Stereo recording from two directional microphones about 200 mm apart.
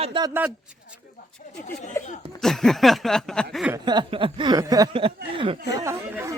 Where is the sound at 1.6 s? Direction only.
40° left (ahead or behind).